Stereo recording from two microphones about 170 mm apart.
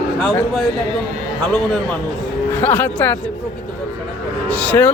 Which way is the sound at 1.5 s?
5° left (ahead or behind).